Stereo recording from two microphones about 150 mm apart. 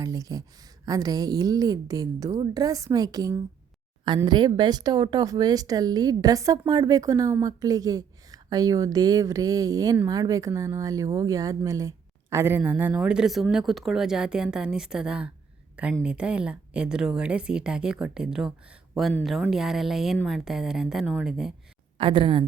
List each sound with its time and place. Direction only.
0.0 s speech: 25° right (ahead or behind); by 15.3 s 5° right (ahead or behind)
15.7 s a sound: 10° right (ahead or behind)
16.0 s speech: 5° right (ahead or behind)
21.9 s speech: 35° right (ahead or behind)